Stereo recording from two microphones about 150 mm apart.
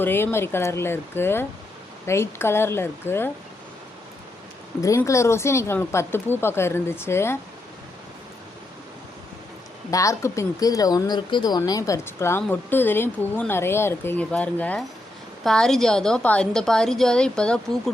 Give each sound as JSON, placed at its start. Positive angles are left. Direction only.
{"t": 0.0, "sound": "speech", "side_deg": 15}
{"t": 4.8, "sound": "speech", "side_deg": 20}
{"t": 9.9, "sound": "a woman's voice", "side_deg": 20}